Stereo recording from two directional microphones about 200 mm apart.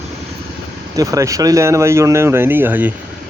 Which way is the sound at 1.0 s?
15° right (ahead or behind).